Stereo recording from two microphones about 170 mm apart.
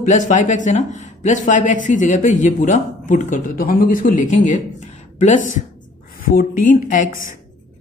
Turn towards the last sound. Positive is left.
turn(degrees=50)  # may be behind; listen again after turning